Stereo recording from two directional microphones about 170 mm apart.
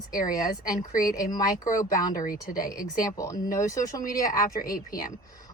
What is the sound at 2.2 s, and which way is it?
Speech, 55° left (ahead or behind).